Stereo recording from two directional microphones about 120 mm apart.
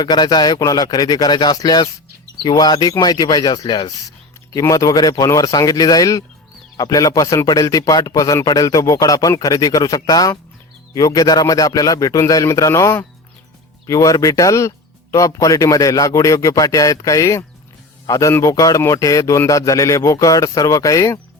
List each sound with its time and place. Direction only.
0.0 s a man's voice: 35° left (ahead or behind)